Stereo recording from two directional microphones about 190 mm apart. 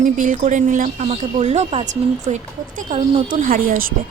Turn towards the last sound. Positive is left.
turn(degrees=-50)  # may be behind; listen again after turning